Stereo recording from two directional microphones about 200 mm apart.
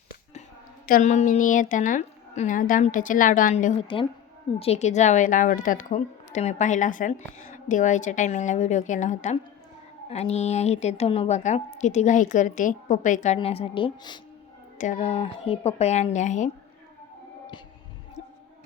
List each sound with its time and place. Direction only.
0.9 s a woman's voice: 40° left (ahead or behind); by 14.2 s 25° left (ahead or behind)
14.8 s a woman's voice: 35° left (ahead or behind)